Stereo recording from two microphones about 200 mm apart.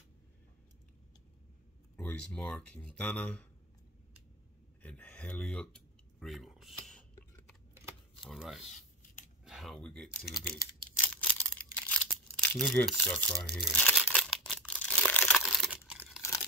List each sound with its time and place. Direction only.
2.0 s speech: 5° left (ahead or behind)
4.8 s speech: 5° left (ahead or behind)
6.1 s a sound: centre (ahead or behind)
8.3 s speech: centre (ahead or behind)
8.6 s scissors: 35° left (ahead or behind)
9.4 s speech: centre (ahead or behind)
11.0 s a sound: 10° left (ahead or behind)